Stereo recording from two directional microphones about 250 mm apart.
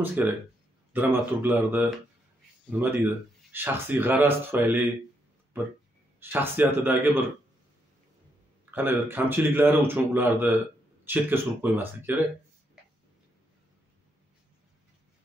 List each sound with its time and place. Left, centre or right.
0.0 s speech: centre
6.1 s speech: centre
8.6 s speech: centre